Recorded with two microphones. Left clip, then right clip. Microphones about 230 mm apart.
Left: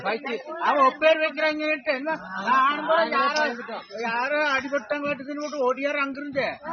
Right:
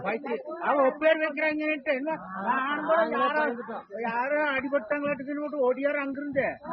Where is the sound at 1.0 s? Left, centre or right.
Left.